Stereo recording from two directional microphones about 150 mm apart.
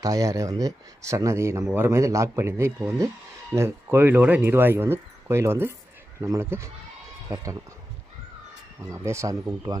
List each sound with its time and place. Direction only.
0.0 s speech: 20° right (ahead or behind)
8.8 s speech: 20° right (ahead or behind)